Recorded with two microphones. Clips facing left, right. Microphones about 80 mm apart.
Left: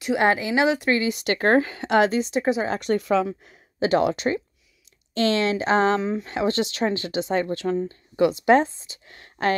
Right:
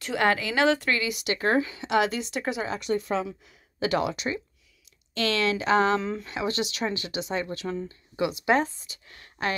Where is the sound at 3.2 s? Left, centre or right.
Left.